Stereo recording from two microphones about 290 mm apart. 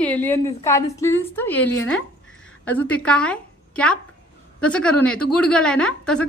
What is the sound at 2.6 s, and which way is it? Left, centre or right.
A woman's voice, centre.